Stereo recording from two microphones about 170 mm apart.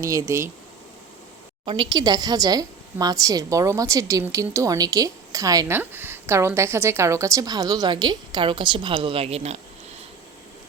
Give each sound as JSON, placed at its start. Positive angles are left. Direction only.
{"t": 0.0, "sound": "speech", "side_deg": -20}
{"t": 1.6, "sound": "a woman's voice", "side_deg": -30}